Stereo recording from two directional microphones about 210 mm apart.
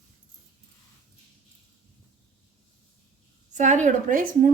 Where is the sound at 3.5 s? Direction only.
35° right (ahead or behind).